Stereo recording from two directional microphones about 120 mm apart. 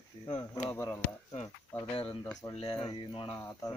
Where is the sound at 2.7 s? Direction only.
35° left (ahead or behind).